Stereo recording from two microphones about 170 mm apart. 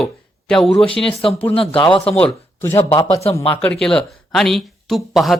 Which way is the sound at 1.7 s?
30° left (ahead or behind).